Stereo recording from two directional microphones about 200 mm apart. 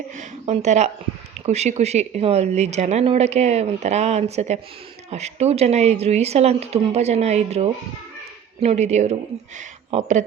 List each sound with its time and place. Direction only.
0.2 s speech: 35° right (ahead or behind)